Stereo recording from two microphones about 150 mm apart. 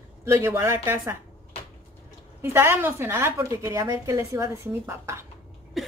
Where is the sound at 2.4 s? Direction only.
15° right (ahead or behind).